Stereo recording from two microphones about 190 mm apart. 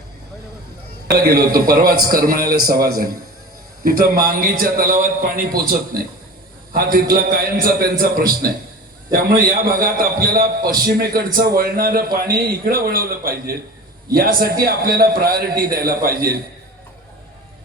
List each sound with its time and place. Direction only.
1.5 s a man's voice: 50° right (ahead or behind)
3.8 s a man's voice: 50° right (ahead or behind)